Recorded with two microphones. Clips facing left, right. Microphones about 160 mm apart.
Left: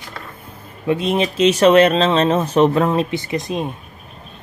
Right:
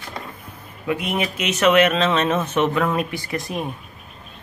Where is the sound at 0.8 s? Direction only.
30° left (ahead or behind).